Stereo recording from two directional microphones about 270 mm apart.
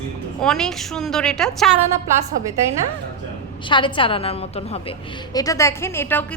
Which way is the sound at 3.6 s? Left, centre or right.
Centre.